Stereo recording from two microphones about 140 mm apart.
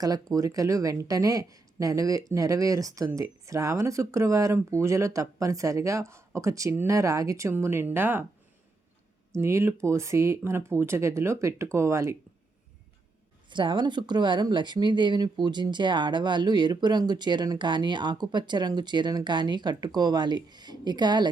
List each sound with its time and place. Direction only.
0.0 s speech: 25° right (ahead or behind)
9.3 s speech: 20° right (ahead or behind)
13.5 s speech: 35° right (ahead or behind)